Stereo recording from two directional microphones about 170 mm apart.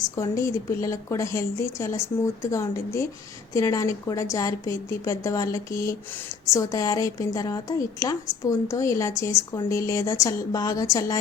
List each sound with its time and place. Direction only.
0.2 s a woman's voice: 20° left (ahead or behind)